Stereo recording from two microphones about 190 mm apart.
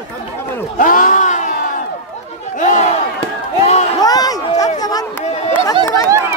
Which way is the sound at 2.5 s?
40° left (ahead or behind).